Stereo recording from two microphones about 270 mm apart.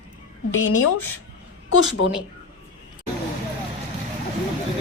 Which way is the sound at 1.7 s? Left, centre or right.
Left.